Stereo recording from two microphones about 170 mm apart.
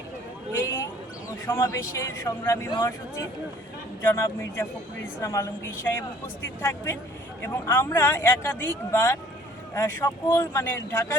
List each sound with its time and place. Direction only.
1.5 s a man's voice: 20° left (ahead or behind)